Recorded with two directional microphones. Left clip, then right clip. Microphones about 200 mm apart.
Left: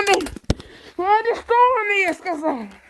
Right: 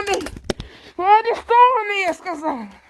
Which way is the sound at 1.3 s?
25° right (ahead or behind).